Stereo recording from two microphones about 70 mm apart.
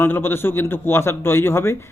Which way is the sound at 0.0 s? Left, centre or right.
Left.